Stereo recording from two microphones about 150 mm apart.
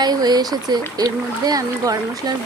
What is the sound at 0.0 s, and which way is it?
Speech, 25° right (ahead or behind).